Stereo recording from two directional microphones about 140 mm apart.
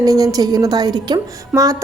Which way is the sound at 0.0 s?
25° right (ahead or behind).